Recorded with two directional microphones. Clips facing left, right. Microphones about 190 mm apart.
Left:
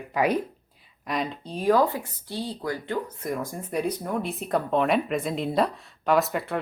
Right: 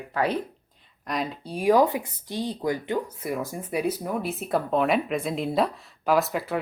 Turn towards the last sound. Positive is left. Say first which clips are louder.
# even
turn(degrees=0)  # may be behind; listen again after turning